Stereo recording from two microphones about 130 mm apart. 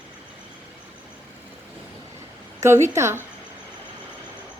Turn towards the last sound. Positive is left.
turn(degrees=-20)  # may be behind; listen again after turning